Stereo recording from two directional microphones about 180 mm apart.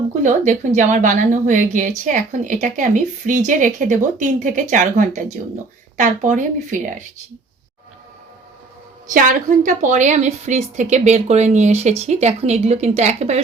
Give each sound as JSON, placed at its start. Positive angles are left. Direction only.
{"t": 0.2, "sound": "a woman's voice", "side_deg": -40}
{"t": 9.0, "sound": "a woman's voice", "side_deg": -45}